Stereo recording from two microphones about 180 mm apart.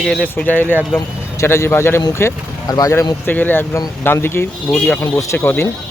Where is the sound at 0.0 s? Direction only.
Centre (ahead or behind).